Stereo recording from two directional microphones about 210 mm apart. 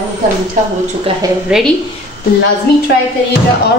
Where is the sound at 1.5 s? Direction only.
5° right (ahead or behind).